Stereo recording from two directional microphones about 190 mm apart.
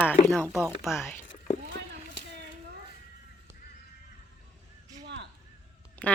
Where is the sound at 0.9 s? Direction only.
15° left (ahead or behind).